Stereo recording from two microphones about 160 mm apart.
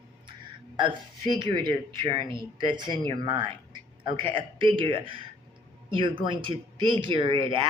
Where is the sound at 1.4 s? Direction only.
30° right (ahead or behind).